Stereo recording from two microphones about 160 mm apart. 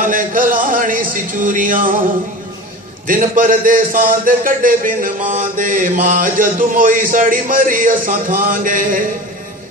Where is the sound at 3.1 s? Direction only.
55° right (ahead or behind).